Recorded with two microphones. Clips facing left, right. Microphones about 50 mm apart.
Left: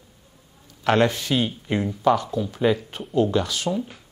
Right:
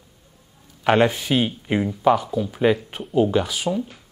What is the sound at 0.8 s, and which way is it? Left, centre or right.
Speech, centre.